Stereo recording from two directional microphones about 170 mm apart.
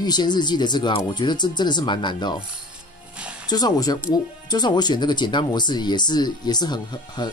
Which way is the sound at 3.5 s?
25° left (ahead or behind).